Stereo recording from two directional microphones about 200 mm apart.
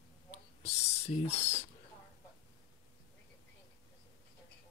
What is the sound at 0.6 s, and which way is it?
Speech, 30° left (ahead or behind).